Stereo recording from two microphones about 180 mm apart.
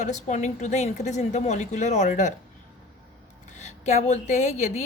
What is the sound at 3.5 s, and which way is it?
A woman's voice, 40° left (ahead or behind).